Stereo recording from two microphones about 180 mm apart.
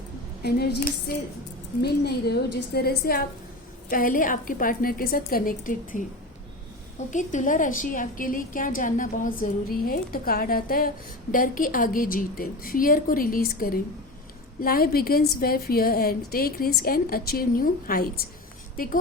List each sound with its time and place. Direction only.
0.4 s a woman's voice: 65° left (ahead or behind)
7.1 s a woman's voice: 45° left (ahead or behind)